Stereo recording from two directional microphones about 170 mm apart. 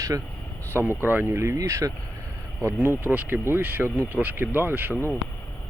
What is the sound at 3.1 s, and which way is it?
Speech, 10° right (ahead or behind).